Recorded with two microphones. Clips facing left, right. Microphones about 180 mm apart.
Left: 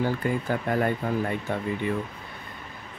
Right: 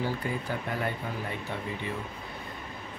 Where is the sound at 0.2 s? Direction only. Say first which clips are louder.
Left 6 dB; 55° left (ahead or behind).